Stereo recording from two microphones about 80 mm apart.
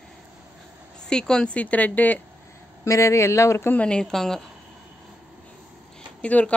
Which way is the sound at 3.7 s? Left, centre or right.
Centre.